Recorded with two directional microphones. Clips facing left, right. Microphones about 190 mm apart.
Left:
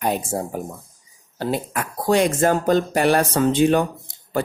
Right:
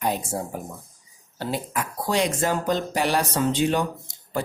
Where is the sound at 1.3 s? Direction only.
55° left (ahead or behind).